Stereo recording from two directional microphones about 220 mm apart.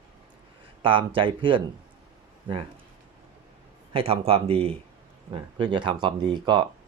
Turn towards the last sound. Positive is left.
turn(degrees=-20)  # may be behind; listen again after turning